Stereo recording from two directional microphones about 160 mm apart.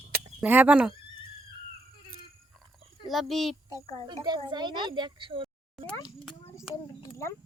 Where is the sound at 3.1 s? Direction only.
Centre (ahead or behind).